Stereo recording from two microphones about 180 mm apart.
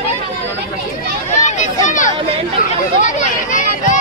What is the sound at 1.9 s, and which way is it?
Speech, 45° left (ahead or behind).